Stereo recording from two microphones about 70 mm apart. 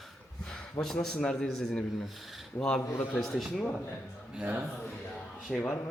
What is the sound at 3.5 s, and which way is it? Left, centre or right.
Speech, centre.